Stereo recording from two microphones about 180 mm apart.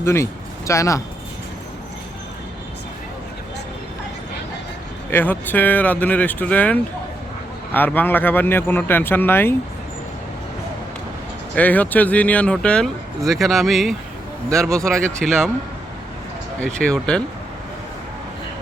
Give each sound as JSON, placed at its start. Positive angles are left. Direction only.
{"t": 0.0, "sound": "speech", "side_deg": 15}
{"t": 5.1, "sound": "speech", "side_deg": 10}
{"t": 11.5, "sound": "speech", "side_deg": 10}
{"t": 14.5, "sound": "speech", "side_deg": -15}
{"t": 15.2, "sound": "speech", "side_deg": 5}
{"t": 16.6, "sound": "speech", "side_deg": 5}